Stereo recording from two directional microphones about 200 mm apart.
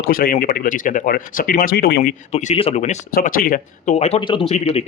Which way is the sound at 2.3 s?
35° left (ahead or behind).